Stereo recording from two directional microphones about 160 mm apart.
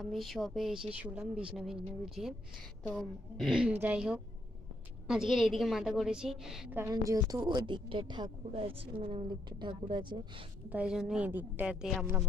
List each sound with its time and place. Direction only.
0.0 s a woman's voice: centre (ahead or behind)
6.8 s a woman's voice: 20° right (ahead or behind)
10.7 s a woman's voice: 5° right (ahead or behind)